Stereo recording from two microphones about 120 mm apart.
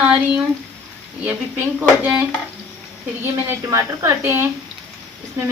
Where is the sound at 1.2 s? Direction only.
15° right (ahead or behind).